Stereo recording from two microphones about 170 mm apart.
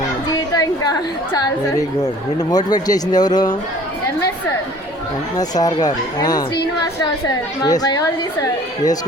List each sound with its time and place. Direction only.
0.5 s a woman's voice: 20° left (ahead or behind)
2.0 s speech: 20° left (ahead or behind)
5.4 s speech: 25° left (ahead or behind)
7.6 s speech: 25° left (ahead or behind)